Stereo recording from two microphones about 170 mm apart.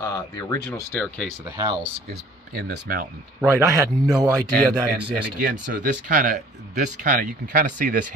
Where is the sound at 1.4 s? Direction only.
20° right (ahead or behind).